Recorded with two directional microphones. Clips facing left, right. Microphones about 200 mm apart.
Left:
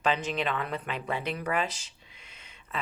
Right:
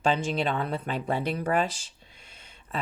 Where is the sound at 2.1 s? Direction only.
35° right (ahead or behind).